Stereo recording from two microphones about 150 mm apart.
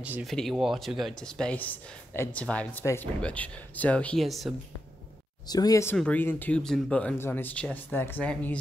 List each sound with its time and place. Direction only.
0.0 s speech: 10° right (ahead or behind)
0.3 s speech: centre (ahead or behind)
2.8 s speech: 20° left (ahead or behind)
3.2 s speech: 10° left (ahead or behind)
5.5 s speech: 25° left (ahead or behind)
5.9 s speech: 10° left (ahead or behind)